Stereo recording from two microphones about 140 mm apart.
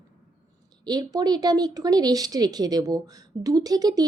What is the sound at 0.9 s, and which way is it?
Speech, 30° right (ahead or behind).